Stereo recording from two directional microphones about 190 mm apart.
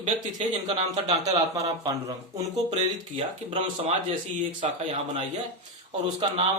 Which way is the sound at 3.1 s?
30° right (ahead or behind).